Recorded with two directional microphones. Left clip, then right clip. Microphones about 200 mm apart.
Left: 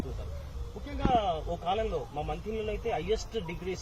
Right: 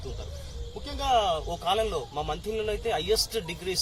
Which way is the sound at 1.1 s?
25° right (ahead or behind).